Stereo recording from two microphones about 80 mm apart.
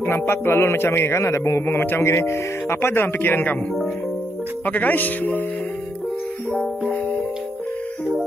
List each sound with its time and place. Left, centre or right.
0.0 s a man's voice: left
4.6 s speech: centre